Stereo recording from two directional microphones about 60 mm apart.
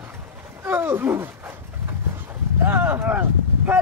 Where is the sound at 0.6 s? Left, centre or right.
Right.